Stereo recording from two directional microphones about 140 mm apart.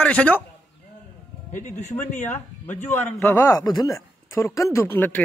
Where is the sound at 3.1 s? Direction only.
20° left (ahead or behind).